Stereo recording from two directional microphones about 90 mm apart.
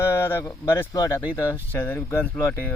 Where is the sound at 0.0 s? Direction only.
30° left (ahead or behind).